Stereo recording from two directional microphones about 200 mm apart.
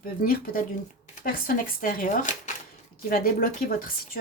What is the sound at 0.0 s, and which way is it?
A woman's voice, 45° left (ahead or behind).